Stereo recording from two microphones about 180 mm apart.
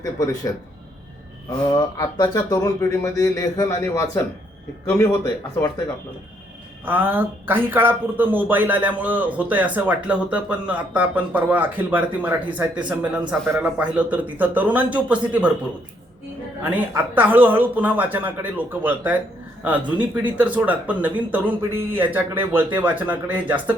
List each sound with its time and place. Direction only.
0.0 s speech: 20° left (ahead or behind)
1.7 s speech: 20° left (ahead or behind)
6.8 s speech: 10° right (ahead or behind)
16.6 s speech: 10° right (ahead or behind)